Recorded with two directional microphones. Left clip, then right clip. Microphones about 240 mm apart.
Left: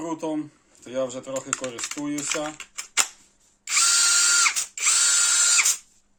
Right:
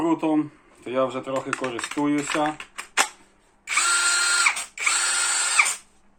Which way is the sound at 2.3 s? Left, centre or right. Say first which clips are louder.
Right 5 dB; left.